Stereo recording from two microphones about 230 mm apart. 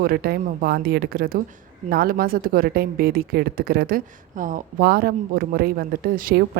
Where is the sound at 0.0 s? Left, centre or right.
Right.